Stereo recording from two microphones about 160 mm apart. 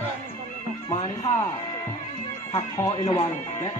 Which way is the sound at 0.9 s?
30° left (ahead or behind).